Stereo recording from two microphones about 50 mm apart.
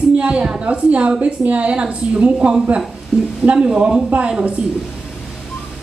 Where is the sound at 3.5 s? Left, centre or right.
Centre.